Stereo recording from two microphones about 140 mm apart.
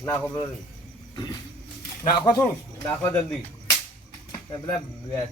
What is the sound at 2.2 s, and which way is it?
Speech, 30° left (ahead or behind).